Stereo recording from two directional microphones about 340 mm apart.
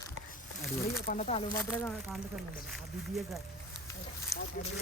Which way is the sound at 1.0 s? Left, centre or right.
Left.